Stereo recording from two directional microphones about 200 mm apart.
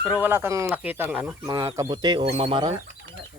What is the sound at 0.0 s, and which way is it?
Speech, 10° right (ahead or behind).